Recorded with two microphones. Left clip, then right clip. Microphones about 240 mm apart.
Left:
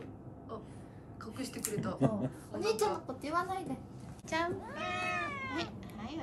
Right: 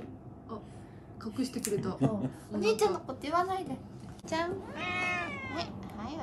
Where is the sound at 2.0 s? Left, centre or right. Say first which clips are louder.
Right 1 dB; centre.